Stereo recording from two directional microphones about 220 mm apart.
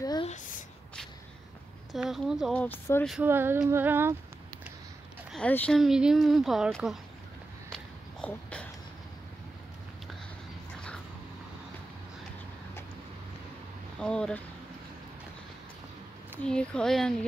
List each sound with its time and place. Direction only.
0.0 s a sound: 20° left (ahead or behind)
1.9 s speech: centre (ahead or behind)
3.2 s female singing: 10° right (ahead or behind)
5.3 s speech: 5° left (ahead or behind)
7.7 s a sound: 5° left (ahead or behind)
13.9 s speech: 5° left (ahead or behind)
16.4 s speech: 5° left (ahead or behind)